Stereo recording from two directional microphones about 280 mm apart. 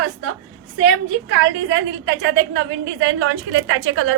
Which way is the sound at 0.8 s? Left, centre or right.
Right.